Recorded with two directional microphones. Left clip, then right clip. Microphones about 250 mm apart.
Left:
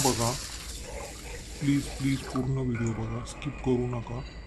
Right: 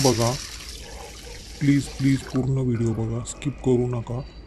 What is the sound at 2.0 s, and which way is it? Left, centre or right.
Speech, right.